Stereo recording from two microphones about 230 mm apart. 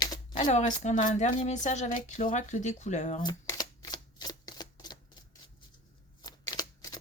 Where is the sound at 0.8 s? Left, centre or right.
Left.